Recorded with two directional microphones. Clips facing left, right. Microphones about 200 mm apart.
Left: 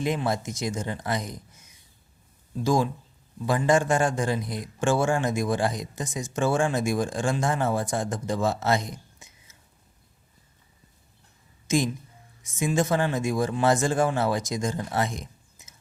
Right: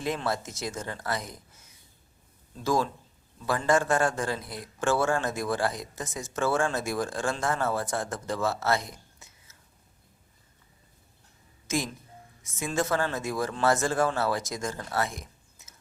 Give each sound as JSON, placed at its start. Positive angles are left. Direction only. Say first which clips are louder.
{"t": 0.0, "sound": "a man's voice", "louder": "left 4 dB", "side_deg": 15}
{"t": 2.6, "sound": "a man's voice", "louder": "left 3 dB", "side_deg": 15}
{"t": 11.7, "sound": "a man's voice", "louder": "left 6 dB", "side_deg": 15}